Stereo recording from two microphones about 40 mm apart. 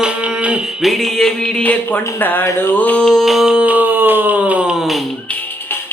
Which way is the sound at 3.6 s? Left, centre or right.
Right.